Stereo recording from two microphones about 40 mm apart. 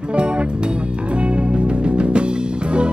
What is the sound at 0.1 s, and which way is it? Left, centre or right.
Music, right.